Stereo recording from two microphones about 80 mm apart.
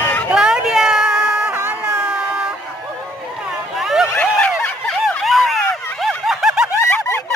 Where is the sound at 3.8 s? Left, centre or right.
Centre.